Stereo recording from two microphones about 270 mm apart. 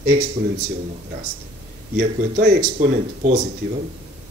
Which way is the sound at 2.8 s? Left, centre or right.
Right.